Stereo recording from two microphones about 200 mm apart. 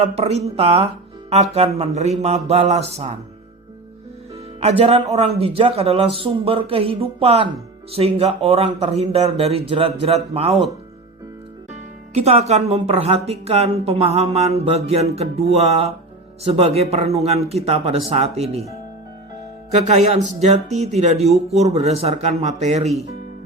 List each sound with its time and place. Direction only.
0.0 s speech: 30° right (ahead or behind)
4.6 s speech: 30° right (ahead or behind)
11.7 s speech: 30° right (ahead or behind)
19.7 s speech: 35° right (ahead or behind)